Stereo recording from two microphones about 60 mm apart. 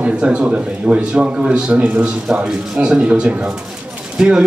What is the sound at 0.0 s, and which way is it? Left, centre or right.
A man's voice, right.